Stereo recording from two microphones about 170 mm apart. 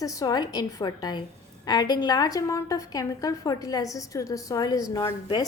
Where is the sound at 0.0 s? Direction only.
20° left (ahead or behind).